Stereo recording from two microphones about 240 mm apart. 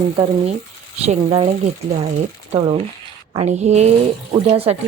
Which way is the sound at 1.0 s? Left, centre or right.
Right.